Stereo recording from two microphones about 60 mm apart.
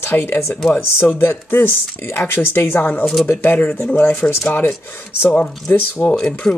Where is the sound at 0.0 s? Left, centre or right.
Left.